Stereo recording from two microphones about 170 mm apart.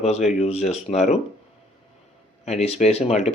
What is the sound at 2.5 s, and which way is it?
Speech, 40° left (ahead or behind).